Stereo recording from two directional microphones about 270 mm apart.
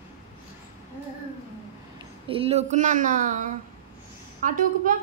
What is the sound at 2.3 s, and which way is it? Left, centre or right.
A woman's voice, right.